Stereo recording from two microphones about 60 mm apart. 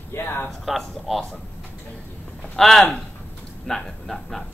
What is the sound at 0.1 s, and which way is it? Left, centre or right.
Speech, left.